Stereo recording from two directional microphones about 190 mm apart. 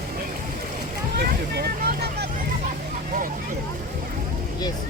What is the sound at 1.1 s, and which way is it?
Speech, 55° right (ahead or behind).